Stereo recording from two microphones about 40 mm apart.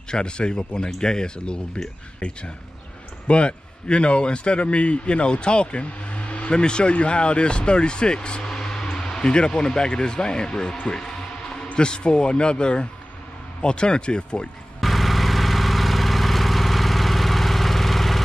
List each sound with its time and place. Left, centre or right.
0.1 s a man's voice: left
3.3 s a man's voice: left
6.5 s a man's voice: left
8.5 s a sound: centre
9.2 s a man's voice: left
14.8 s vehicle: centre